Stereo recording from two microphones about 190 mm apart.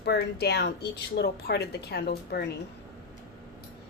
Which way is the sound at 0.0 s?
60° left (ahead or behind).